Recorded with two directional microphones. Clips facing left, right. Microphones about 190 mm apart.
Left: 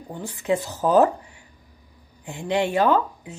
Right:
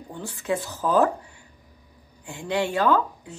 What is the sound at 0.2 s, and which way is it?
Speech, 15° left (ahead or behind).